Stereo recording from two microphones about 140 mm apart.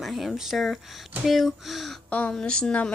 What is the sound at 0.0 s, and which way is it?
A woman's voice, centre (ahead or behind).